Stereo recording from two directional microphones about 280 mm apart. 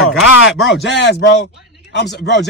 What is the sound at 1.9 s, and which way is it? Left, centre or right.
Speech, left.